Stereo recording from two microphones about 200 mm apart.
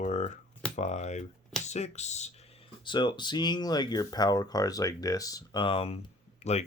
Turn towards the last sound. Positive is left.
turn(degrees=35)  # may be behind; listen again after turning